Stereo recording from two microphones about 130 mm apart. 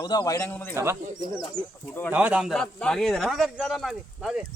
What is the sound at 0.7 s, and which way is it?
Speech, 20° right (ahead or behind).